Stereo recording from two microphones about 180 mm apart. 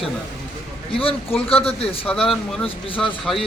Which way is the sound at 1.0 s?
30° left (ahead or behind).